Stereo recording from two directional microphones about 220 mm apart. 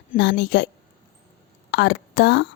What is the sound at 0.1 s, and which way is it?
Speech, 50° left (ahead or behind).